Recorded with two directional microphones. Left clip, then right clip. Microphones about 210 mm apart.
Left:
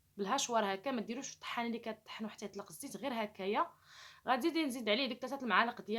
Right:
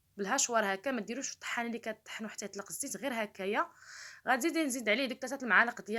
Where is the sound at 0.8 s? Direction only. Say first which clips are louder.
Right 3 dB; 15° right (ahead or behind).